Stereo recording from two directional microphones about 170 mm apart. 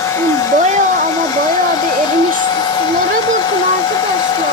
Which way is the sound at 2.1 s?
25° left (ahead or behind).